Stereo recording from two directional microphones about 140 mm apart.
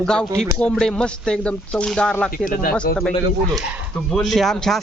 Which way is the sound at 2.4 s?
90° left.